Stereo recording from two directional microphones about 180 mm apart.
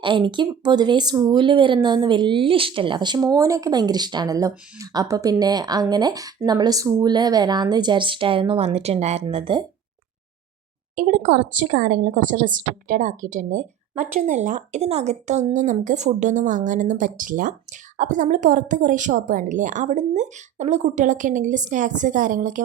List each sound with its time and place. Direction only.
0.0 s speech: 25° right (ahead or behind)
10.9 s speech: 50° right (ahead or behind)